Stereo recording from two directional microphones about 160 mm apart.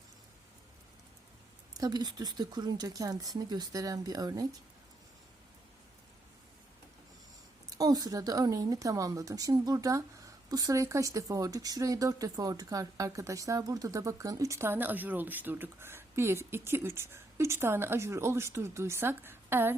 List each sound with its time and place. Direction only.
1.8 s a woman's voice: 25° right (ahead or behind)
7.7 s a woman's voice: 25° right (ahead or behind)